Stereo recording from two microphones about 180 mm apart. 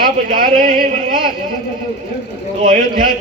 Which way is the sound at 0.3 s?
50° right (ahead or behind).